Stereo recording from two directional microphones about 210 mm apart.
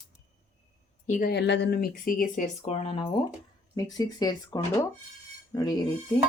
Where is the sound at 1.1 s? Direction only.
45° left (ahead or behind).